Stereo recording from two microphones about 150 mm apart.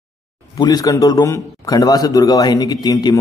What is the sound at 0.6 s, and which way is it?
A man's voice, 25° left (ahead or behind).